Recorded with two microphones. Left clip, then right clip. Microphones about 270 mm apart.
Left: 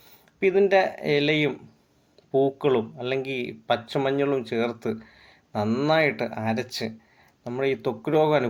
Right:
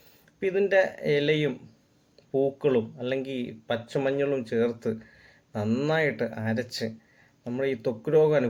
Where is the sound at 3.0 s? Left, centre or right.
Centre.